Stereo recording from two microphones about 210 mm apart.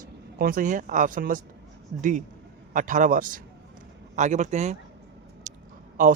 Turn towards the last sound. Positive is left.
turn(degrees=-40)  # may be behind; listen again after turning